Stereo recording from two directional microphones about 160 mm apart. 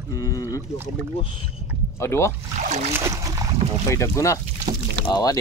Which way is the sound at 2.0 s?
15° left (ahead or behind).